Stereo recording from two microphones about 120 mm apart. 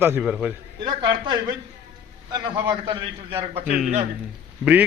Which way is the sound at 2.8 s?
40° right (ahead or behind).